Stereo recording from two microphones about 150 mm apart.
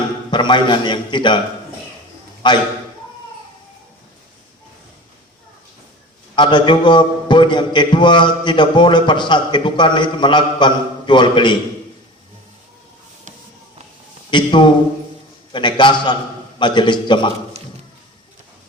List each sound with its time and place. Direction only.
0.3 s a man's voice: 30° left (ahead or behind)
2.4 s a man's voice: 30° left (ahead or behind)
6.3 s a man's voice: 30° left (ahead or behind)
14.3 s a man's voice: 30° left (ahead or behind)